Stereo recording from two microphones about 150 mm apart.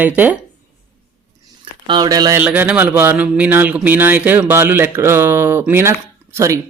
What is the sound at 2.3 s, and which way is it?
Speech, 10° right (ahead or behind).